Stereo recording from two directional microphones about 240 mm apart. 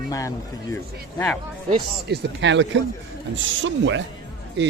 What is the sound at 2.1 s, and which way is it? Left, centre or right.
Speech, right.